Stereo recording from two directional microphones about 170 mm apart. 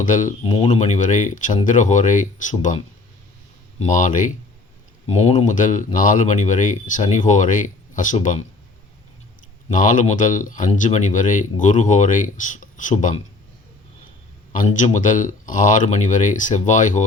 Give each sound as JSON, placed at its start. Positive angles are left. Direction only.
{"t": 0.0, "sound": "speech", "side_deg": 50}
{"t": 0.4, "sound": "speech", "side_deg": 30}
{"t": 9.6, "sound": "speech", "side_deg": 50}
{"t": 14.5, "sound": "speech", "side_deg": 50}